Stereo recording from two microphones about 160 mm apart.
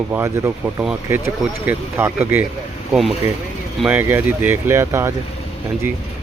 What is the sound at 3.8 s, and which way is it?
Speech, 10° right (ahead or behind).